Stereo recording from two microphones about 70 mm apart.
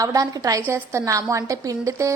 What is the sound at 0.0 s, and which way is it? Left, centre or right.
Speech, right.